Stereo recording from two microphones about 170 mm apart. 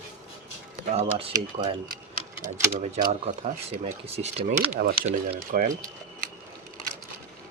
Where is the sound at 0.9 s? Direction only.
35° right (ahead or behind).